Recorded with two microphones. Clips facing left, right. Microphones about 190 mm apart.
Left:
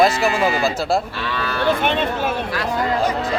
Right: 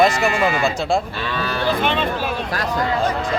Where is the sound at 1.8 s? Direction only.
50° left (ahead or behind).